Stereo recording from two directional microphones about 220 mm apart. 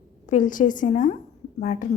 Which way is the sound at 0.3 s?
35° left (ahead or behind).